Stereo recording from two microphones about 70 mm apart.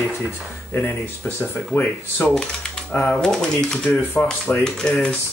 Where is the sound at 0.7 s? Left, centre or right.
Left.